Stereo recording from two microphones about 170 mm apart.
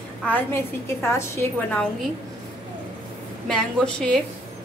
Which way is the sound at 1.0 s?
15° left (ahead or behind).